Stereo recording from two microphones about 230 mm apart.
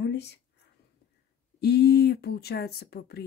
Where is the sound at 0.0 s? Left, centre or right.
Left.